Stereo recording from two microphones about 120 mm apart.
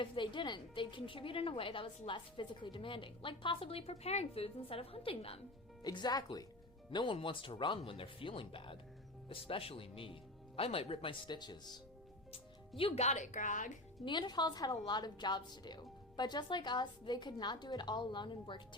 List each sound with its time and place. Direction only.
0.0 s a woman's voice: 45° left (ahead or behind)
5.8 s a woman's voice: 35° left (ahead or behind)
12.3 s speech: 50° left (ahead or behind); by 13.7 s 90° left
14.0 s a woman's voice: 40° left (ahead or behind)